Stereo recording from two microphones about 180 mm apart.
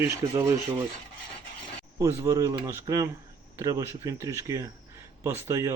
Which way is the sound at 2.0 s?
15° right (ahead or behind).